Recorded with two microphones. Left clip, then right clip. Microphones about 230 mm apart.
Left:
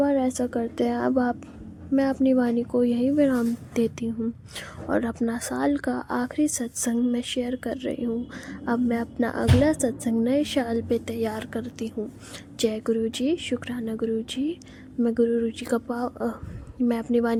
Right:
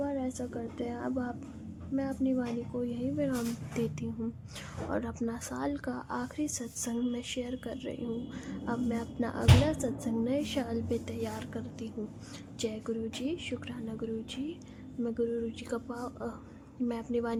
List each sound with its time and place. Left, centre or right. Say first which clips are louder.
0.0 s speech: left 12 dB; left